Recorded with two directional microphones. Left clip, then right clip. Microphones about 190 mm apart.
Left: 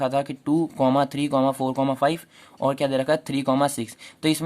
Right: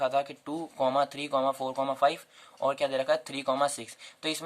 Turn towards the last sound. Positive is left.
turn(degrees=30)  # may be behind; listen again after turning